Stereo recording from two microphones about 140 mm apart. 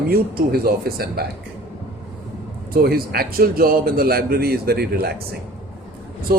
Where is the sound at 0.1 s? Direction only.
90° right.